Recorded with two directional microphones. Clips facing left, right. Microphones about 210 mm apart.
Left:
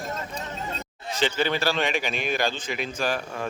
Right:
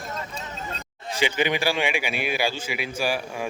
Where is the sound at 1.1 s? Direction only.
15° right (ahead or behind).